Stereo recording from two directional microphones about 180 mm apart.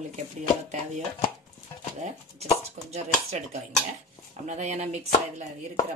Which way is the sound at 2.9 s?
35° right (ahead or behind).